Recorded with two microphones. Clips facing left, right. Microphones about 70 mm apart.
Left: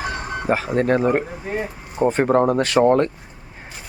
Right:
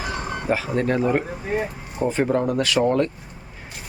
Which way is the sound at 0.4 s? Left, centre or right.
Left.